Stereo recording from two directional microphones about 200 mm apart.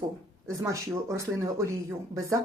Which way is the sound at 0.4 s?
15° right (ahead or behind).